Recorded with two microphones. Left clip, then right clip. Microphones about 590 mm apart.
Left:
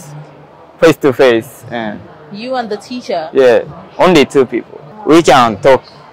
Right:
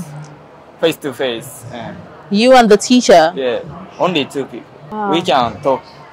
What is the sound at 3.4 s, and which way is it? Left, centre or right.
A man's voice, left.